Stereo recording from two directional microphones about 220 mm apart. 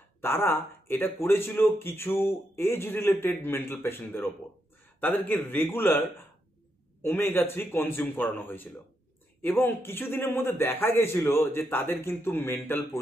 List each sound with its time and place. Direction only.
0.2 s speech: 10° left (ahead or behind)